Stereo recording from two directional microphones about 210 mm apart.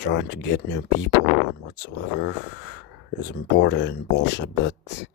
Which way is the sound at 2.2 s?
55° left (ahead or behind).